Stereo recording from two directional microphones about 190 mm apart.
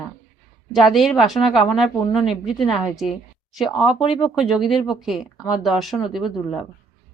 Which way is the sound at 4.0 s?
25° left (ahead or behind).